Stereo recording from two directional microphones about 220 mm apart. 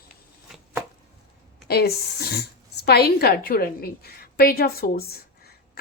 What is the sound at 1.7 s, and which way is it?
A woman's voice, 45° left (ahead or behind).